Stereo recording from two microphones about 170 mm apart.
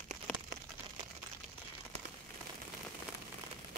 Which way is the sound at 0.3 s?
10° left (ahead or behind).